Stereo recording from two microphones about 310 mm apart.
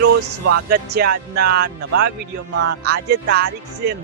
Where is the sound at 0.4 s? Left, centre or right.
Right.